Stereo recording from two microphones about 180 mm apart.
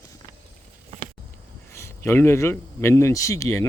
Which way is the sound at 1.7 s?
15° left (ahead or behind).